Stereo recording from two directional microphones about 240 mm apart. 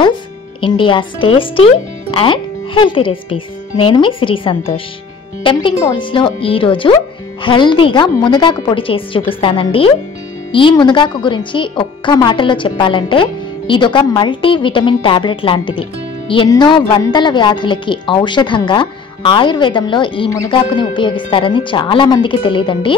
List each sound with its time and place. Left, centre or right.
0.6 s speech: left